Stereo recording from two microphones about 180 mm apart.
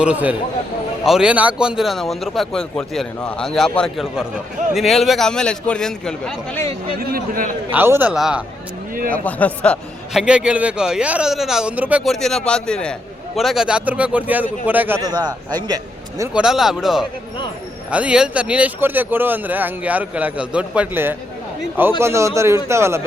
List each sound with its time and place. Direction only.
0.0 s speech: 10° right (ahead or behind)
7.0 s a man's voice: 50° right (ahead or behind)
7.7 s speech: 10° right (ahead or behind)
9.1 s a man's voice: 10° left (ahead or behind)
10.2 s speech: 5° right (ahead or behind)
16.3 s speech: 5° right (ahead or behind)